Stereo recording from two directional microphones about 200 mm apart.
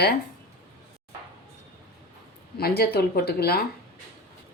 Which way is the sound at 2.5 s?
50° left (ahead or behind).